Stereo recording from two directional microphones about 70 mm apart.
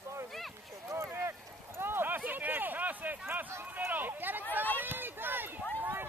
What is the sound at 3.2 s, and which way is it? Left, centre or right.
Run, right.